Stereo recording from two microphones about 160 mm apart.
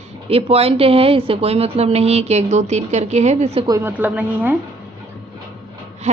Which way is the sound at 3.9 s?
10° right (ahead or behind).